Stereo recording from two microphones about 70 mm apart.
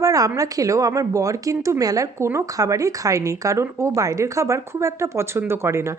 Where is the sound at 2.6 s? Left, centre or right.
Right.